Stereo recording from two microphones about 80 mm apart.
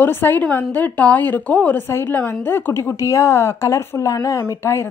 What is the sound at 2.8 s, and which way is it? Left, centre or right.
A woman's voice, left.